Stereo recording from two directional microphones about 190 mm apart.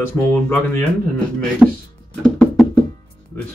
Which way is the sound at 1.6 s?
5° right (ahead or behind).